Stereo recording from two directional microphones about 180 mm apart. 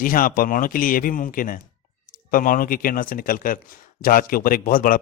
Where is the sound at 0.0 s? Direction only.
50° left (ahead or behind).